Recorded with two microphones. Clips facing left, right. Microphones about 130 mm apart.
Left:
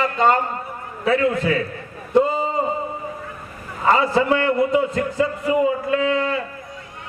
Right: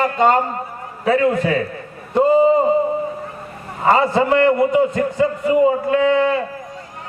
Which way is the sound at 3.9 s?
30° right (ahead or behind).